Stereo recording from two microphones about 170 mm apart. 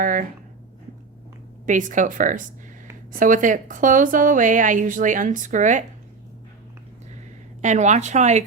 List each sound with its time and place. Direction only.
0.0 s a sound: 50° right (ahead or behind)
1.6 s a woman's voice: 50° right (ahead or behind)
7.6 s a woman's voice: 45° right (ahead or behind)